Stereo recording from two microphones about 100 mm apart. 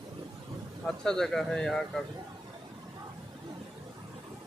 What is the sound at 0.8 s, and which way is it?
Speech, 5° left (ahead or behind).